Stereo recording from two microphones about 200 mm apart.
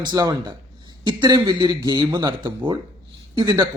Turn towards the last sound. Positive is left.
turn(degrees=-20)  # may be behind; listen again after turning